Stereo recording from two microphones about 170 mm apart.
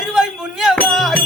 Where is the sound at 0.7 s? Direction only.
5° left (ahead or behind).